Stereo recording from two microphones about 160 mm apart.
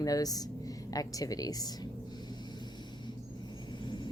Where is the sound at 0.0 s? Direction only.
25° left (ahead or behind).